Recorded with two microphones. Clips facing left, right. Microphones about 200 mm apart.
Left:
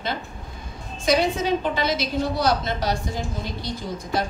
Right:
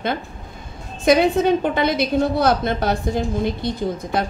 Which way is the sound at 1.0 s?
55° right (ahead or behind).